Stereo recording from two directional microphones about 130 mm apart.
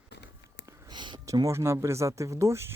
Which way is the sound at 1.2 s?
25° right (ahead or behind).